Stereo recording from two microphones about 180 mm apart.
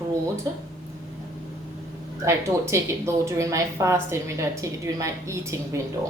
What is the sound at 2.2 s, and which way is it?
A woman's voice, 15° right (ahead or behind).